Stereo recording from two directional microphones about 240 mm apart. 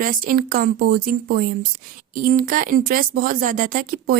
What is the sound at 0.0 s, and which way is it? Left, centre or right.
Speech, right.